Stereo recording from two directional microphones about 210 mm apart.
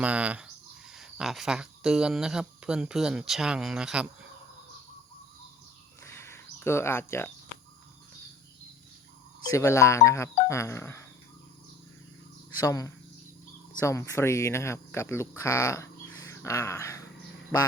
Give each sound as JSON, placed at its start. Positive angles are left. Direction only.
{"t": 0.0, "sound": "speech", "side_deg": -5}
{"t": 6.1, "sound": "a sound", "side_deg": 10}
{"t": 9.5, "sound": "speech", "side_deg": 15}
{"t": 12.5, "sound": "speech", "side_deg": 15}